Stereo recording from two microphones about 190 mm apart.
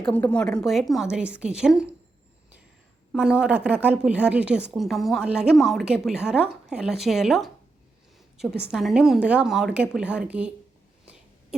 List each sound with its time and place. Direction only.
0.0 s a woman's voice: 5° left (ahead or behind)
3.2 s a woman's voice: 5° right (ahead or behind)
8.7 s a woman's voice: centre (ahead or behind)